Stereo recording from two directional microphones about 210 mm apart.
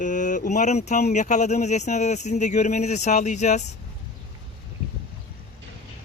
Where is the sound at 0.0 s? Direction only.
35° left (ahead or behind).